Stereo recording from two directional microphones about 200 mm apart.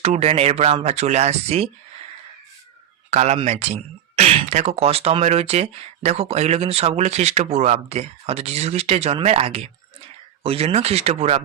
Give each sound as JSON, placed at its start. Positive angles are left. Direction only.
{"t": 0.0, "sound": "speech", "side_deg": -30}
{"t": 3.1, "sound": "speech", "side_deg": -35}